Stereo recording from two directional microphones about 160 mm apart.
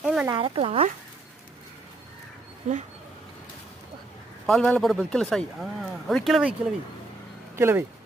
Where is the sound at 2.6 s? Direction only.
45° right (ahead or behind).